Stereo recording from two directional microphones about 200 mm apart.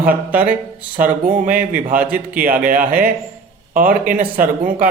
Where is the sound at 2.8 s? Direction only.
45° right (ahead or behind).